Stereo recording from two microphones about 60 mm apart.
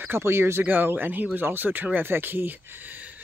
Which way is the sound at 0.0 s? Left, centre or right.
Right.